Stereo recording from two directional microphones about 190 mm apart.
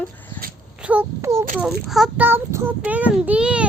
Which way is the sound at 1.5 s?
Centre (ahead or behind).